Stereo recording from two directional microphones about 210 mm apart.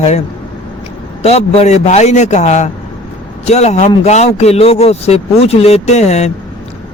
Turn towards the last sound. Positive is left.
turn(degrees=30)  # may be behind; listen again after turning